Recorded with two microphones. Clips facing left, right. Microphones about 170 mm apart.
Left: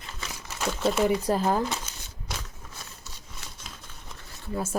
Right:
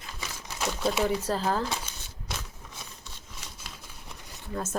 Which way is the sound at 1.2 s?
15° left (ahead or behind).